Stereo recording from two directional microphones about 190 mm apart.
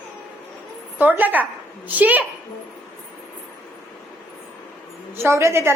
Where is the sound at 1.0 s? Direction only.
10° right (ahead or behind).